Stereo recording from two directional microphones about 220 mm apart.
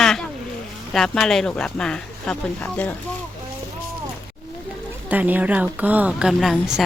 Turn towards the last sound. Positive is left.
turn(degrees=0)  # may be behind; listen again after turning